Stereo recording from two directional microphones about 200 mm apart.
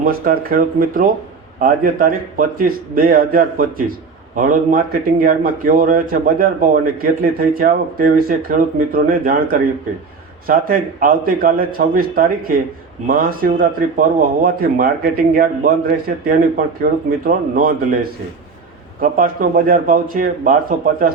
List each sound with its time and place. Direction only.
0.0 s a man's voice: 45° right (ahead or behind)
18.9 s a man's voice: 45° right (ahead or behind)